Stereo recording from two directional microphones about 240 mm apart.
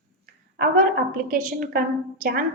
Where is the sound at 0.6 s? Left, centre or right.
Right.